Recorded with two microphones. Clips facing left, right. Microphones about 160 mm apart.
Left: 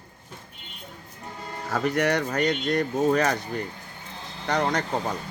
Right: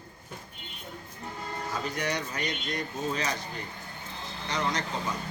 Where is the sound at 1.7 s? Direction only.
65° left (ahead or behind).